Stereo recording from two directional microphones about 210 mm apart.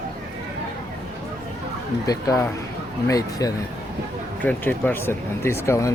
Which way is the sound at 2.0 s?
15° left (ahead or behind).